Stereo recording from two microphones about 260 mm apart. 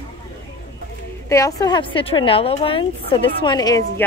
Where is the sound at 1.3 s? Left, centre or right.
Centre.